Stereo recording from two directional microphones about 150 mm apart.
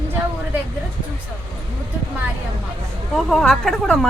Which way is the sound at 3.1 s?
Centre (ahead or behind).